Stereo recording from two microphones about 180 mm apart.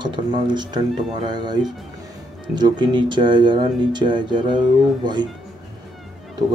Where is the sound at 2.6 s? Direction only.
25° right (ahead or behind).